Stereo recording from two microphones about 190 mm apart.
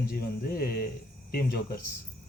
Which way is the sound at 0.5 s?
55° left (ahead or behind).